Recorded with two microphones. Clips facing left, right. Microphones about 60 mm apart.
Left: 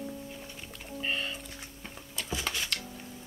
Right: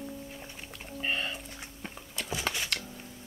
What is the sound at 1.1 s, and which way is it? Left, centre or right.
Music, right.